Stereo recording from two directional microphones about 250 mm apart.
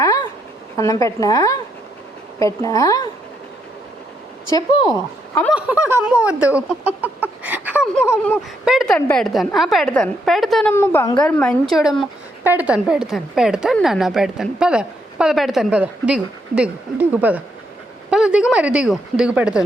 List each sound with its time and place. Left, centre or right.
0.8 s a woman's voice: centre
5.5 s speech: centre
8.0 s a woman's voice: centre